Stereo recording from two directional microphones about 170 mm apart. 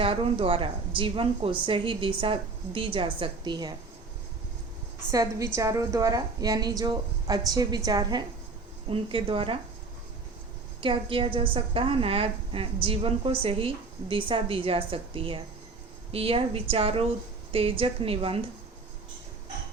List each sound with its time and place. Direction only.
0.0 s a woman's voice: 35° right (ahead or behind)
5.1 s a woman's voice: 20° right (ahead or behind)
10.8 s a woman's voice: 30° right (ahead or behind)